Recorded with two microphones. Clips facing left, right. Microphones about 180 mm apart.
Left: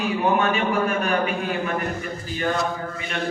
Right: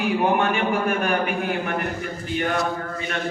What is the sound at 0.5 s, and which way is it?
A man's voice, 55° right (ahead or behind).